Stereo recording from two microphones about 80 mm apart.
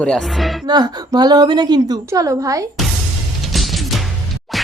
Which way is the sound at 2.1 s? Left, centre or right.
Right.